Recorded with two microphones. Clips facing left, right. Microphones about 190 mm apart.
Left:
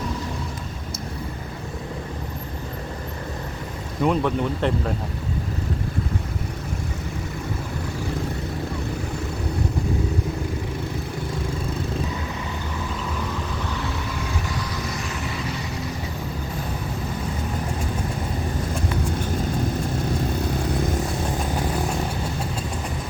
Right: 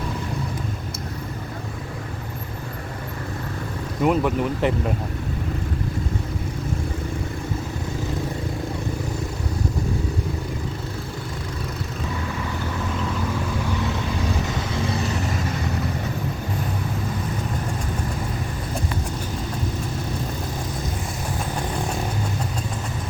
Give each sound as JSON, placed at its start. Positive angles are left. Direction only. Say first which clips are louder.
{"t": 4.0, "sound": "speech", "louder": "right 1 dB", "side_deg": -5}
{"t": 14.6, "sound": "vehicle", "louder": "right 4 dB", "side_deg": -30}